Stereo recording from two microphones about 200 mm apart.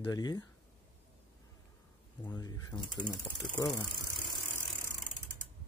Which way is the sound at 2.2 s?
20° left (ahead or behind).